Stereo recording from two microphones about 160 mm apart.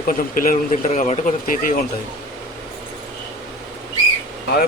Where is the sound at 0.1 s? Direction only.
55° left (ahead or behind).